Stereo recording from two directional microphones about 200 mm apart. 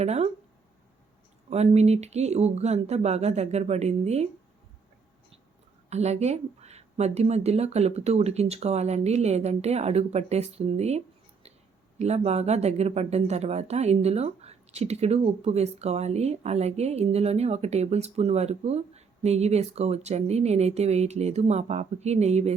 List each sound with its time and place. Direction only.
0.0 s speech: 35° right (ahead or behind)
1.5 s speech: 30° right (ahead or behind)
5.9 s speech: 35° right (ahead or behind)